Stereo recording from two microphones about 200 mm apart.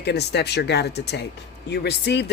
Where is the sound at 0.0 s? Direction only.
55° left (ahead or behind).